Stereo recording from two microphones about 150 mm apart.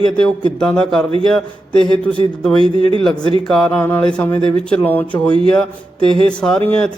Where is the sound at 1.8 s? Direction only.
35° right (ahead or behind).